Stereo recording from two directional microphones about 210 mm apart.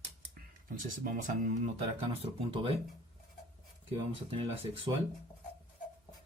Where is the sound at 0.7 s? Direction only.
40° right (ahead or behind).